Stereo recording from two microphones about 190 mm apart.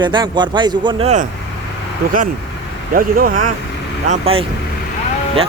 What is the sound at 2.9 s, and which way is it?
Speech, 50° right (ahead or behind).